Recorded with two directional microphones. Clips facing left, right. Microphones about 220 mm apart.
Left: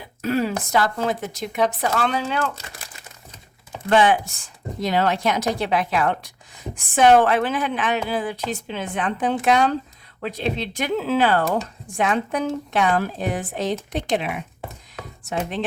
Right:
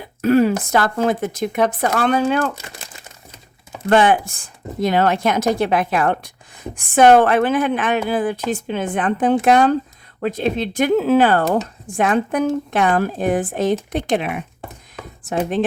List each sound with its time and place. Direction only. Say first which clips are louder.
0.2 s a sound: right 8 dB; 55° right (ahead or behind)
0.7 s speech: right 4 dB; 55° right (ahead or behind)
3.8 s speech: right 3 dB; 55° right (ahead or behind)